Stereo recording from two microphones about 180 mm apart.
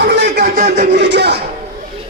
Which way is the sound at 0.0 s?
65° right (ahead or behind).